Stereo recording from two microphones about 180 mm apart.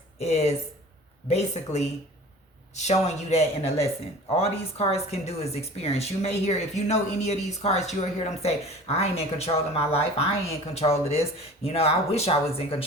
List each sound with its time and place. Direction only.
0.2 s speech: 35° left (ahead or behind)